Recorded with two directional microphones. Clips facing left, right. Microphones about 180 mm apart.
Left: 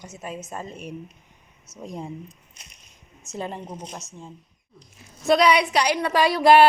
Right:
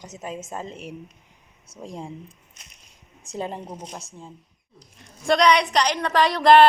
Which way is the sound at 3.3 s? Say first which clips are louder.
Right 1 dB; 15° right (ahead or behind).